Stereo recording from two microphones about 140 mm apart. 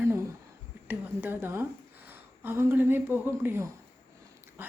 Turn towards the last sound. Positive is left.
turn(degrees=-15)  # may be behind; listen again after turning